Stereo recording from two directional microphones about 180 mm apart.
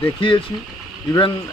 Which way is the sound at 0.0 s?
30° left (ahead or behind).